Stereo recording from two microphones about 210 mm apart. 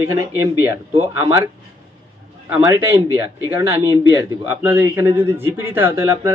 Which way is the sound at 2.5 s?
15° right (ahead or behind).